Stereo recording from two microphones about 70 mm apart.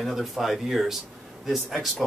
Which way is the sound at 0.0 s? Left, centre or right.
Centre.